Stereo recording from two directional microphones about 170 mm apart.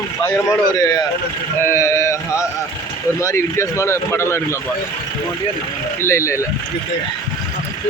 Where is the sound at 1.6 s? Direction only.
15° left (ahead or behind).